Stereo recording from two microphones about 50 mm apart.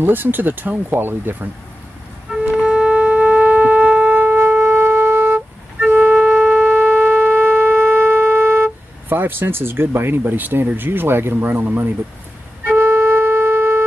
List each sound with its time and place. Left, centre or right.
0.0 s speech: right
2.6 s shofar: right
5.9 s music: right
6.6 s shofar: right
9.1 s speech: right
12.6 s wind instrument: right